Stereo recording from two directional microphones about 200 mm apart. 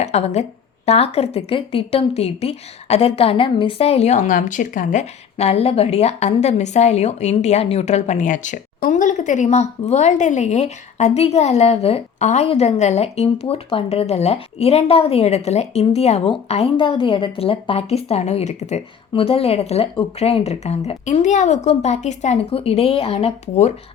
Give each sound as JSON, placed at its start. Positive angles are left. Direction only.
{"t": 0.0, "sound": "a woman's voice", "side_deg": 35}